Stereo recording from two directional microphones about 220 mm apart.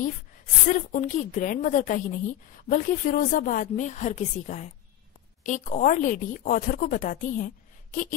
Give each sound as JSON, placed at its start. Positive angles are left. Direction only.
{"t": 0.7, "sound": "a woman's voice", "side_deg": 35}